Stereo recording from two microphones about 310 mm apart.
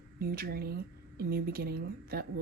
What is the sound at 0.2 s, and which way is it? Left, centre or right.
A woman's voice, right.